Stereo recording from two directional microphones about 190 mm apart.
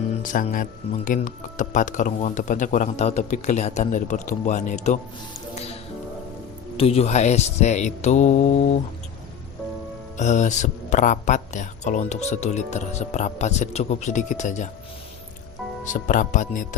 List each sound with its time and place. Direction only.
0.1 s speech: 45° left (ahead or behind)
5.5 s music: 30° left (ahead or behind)
6.7 s speech: 30° left (ahead or behind)
10.2 s speech: 40° left (ahead or behind)
15.8 s speech: 40° left (ahead or behind)